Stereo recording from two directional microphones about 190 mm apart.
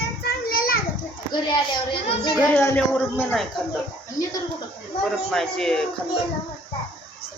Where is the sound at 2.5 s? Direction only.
10° left (ahead or behind).